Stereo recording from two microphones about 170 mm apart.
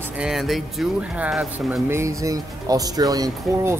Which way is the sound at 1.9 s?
15° right (ahead or behind).